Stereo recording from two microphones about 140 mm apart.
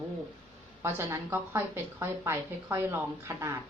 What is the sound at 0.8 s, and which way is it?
Speech, 15° right (ahead or behind).